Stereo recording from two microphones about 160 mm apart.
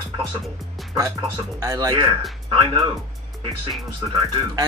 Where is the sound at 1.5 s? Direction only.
20° right (ahead or behind).